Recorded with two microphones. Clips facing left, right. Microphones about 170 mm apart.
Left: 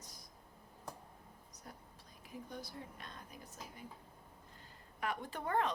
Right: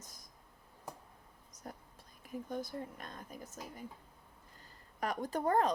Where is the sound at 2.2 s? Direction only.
50° right (ahead or behind).